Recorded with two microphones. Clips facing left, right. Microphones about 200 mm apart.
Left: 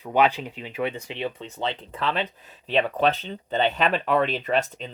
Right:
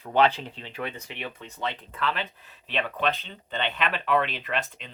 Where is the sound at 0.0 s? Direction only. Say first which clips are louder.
Left 1 dB; 15° left (ahead or behind).